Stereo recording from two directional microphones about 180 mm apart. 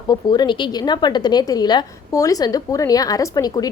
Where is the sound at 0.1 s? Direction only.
25° left (ahead or behind).